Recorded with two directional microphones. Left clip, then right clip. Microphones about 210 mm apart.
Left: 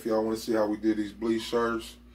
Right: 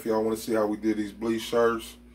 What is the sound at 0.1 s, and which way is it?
Speech, 35° right (ahead or behind).